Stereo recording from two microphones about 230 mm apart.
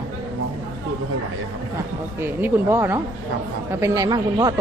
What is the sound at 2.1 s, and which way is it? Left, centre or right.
A woman's voice, centre.